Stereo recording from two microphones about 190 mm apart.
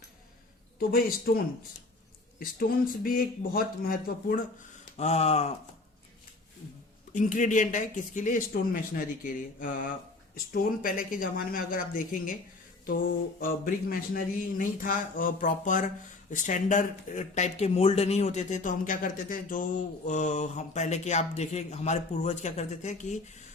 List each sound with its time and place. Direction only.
0.8 s speech: 50° left (ahead or behind)
2.4 s speech: 50° left (ahead or behind)
4.9 s speech: 35° left (ahead or behind)
7.1 s speech: 40° left (ahead or behind)
12.8 s mantra: 45° left (ahead or behind)
13.4 s speech: 50° left (ahead or behind)